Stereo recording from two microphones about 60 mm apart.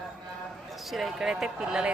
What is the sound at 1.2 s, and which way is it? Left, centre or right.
Speech, centre.